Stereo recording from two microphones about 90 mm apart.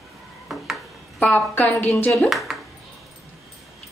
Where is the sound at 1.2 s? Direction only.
20° left (ahead or behind).